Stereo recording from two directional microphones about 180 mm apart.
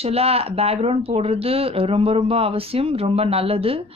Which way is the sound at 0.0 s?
35° right (ahead or behind).